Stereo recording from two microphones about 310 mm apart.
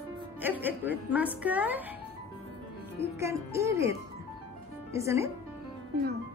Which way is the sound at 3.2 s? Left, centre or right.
Centre.